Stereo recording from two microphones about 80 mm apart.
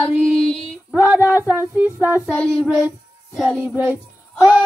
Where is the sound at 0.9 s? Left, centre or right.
Right.